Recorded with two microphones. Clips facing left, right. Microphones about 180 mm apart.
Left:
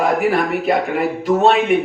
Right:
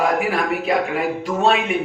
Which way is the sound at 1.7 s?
60° left (ahead or behind).